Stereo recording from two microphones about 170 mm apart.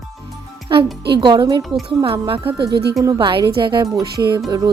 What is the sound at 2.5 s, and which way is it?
Speech, 75° right (ahead or behind).